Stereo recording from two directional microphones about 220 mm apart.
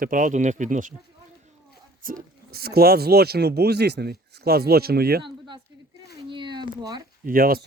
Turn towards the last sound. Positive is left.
turn(degrees=-40)  # may be behind; listen again after turning